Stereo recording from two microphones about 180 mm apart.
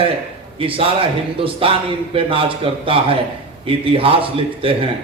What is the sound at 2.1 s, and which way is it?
A man's voice, 30° right (ahead or behind).